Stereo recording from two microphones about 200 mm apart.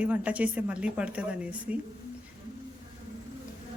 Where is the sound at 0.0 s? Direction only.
5° right (ahead or behind).